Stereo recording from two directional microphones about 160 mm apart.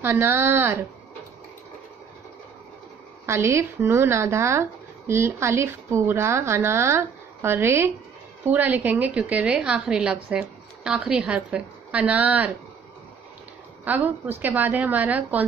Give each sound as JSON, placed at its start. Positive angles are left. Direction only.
{"t": 0.0, "sound": "speech", "side_deg": -15}
{"t": 3.3, "sound": "speech", "side_deg": -15}
{"t": 13.8, "sound": "speech", "side_deg": -10}